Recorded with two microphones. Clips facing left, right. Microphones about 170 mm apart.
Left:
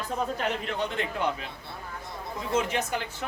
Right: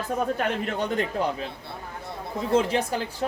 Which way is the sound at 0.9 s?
35° right (ahead or behind).